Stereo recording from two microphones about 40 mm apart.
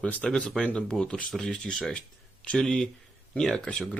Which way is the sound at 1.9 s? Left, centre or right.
Left.